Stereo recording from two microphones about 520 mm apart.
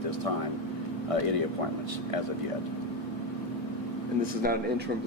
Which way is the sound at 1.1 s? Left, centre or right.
Right.